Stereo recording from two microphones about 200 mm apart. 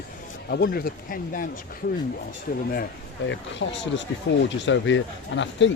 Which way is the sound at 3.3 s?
65° left (ahead or behind).